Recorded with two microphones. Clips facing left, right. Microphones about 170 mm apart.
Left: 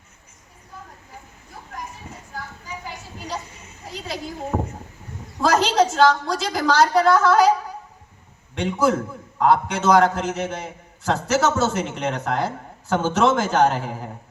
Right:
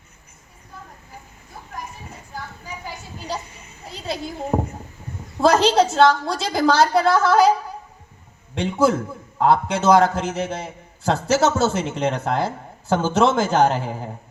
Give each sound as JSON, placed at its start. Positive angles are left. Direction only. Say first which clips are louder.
{"t": 3.9, "sound": "a sound", "louder": "right 3 dB", "side_deg": -30}
{"t": 4.5, "sound": "a man's voice", "louder": "right 4 dB", "side_deg": -35}
{"t": 8.5, "sound": "a man's voice", "louder": "right 1 dB", "side_deg": -30}